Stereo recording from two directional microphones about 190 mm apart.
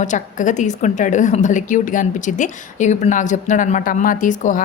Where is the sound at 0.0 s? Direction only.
40° left (ahead or behind).